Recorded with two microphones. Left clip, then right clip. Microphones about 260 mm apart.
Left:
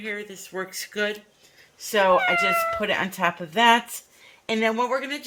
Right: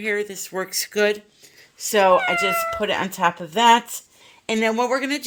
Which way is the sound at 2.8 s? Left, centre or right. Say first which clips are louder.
Right 3 dB; right.